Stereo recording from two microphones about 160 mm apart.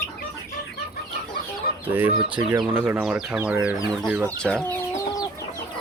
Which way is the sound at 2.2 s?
30° right (ahead or behind).